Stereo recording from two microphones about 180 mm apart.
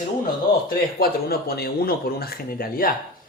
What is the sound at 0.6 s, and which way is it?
Speech, 60° left (ahead or behind).